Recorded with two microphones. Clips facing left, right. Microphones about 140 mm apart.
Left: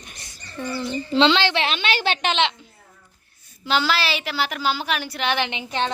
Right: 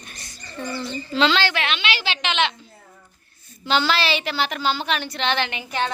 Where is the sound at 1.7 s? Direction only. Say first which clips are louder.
Left 3 dB; 45° left (ahead or behind).